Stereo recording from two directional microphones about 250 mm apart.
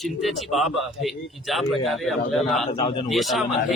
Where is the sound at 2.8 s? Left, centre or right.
Centre.